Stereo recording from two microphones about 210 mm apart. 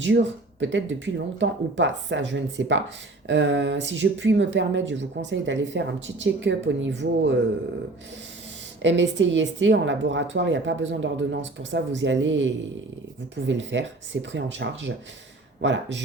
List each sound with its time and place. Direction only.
0.0 s speech: 60° right (ahead or behind)
8.8 s speech: 60° right (ahead or behind)